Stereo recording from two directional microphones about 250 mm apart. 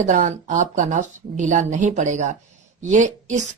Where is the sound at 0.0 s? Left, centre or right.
Right.